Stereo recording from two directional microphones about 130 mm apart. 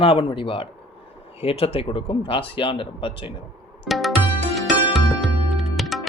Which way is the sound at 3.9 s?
Centre (ahead or behind).